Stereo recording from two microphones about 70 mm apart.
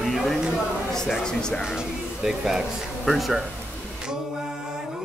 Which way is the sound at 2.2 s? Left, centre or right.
Centre.